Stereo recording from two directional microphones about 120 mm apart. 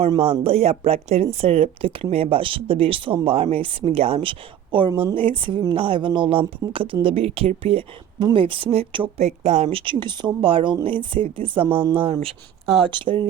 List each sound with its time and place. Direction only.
0.2 s speech: 55° right (ahead or behind)
8.2 s speech: 45° right (ahead or behind)
9.1 s speech: 65° right (ahead or behind)
9.8 s speech: 45° right (ahead or behind)
12.6 s speech: centre (ahead or behind)
12.9 s speech: 45° right (ahead or behind)